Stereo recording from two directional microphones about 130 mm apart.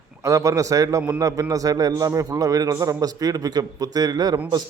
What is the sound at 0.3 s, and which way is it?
A man's voice, 25° right (ahead or behind).